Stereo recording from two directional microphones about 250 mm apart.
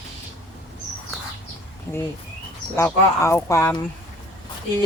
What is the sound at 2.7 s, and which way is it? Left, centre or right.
Speech, centre.